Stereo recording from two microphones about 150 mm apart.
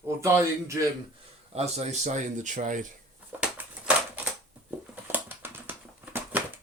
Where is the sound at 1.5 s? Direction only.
45° right (ahead or behind).